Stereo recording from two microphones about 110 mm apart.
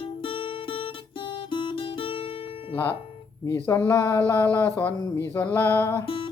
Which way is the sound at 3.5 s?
25° left (ahead or behind).